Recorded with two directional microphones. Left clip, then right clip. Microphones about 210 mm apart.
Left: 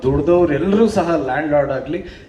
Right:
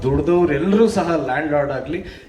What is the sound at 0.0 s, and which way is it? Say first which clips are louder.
A man's voice: left 3 dB; 45° right (ahead or behind).